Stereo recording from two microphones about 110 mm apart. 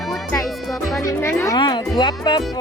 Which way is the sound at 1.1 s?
20° left (ahead or behind).